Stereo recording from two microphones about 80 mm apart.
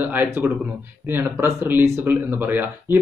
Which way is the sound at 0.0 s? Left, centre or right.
Right.